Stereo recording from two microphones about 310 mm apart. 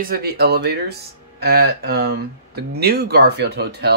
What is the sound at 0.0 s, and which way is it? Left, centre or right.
Speech, right.